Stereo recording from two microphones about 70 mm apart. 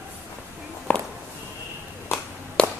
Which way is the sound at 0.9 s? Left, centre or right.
Left.